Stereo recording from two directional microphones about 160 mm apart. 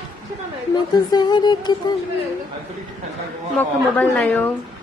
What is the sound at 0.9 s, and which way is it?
Music, 25° left (ahead or behind).